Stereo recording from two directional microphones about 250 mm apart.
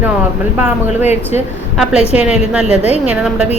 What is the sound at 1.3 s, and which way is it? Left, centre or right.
Speech, centre.